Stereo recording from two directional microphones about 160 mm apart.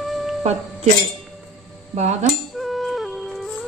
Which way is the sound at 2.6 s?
Centre (ahead or behind).